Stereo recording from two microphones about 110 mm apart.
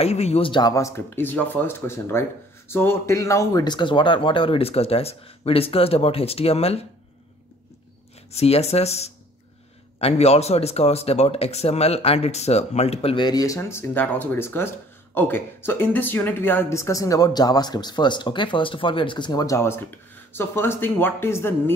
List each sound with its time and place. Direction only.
0.0 s speech: 70° left (ahead or behind); by 3.6 s 30° left (ahead or behind)
3.6 s speech: 45° left (ahead or behind); by 6.9 s 65° left (ahead or behind)
8.3 s speech: 70° left (ahead or behind)
13.1 s a woman's voice: 40° left (ahead or behind)
19.4 s speech: 25° left (ahead or behind)